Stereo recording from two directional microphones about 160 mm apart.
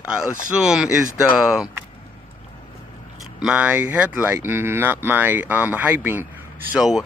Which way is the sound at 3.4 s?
10° right (ahead or behind).